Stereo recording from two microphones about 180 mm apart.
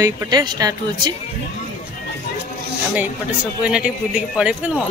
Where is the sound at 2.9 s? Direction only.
5° right (ahead or behind).